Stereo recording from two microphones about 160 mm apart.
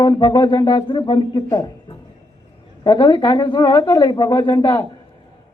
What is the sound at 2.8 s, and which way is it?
Speech, 30° left (ahead or behind).